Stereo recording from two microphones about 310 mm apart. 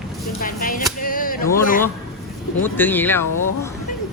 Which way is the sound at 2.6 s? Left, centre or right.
Centre.